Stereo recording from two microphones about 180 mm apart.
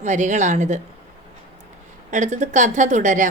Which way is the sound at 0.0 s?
40° right (ahead or behind).